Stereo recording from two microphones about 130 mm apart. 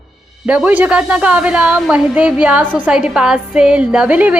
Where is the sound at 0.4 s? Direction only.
10° right (ahead or behind).